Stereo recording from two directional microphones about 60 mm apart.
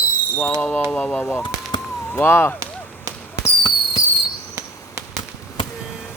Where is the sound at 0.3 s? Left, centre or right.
Left.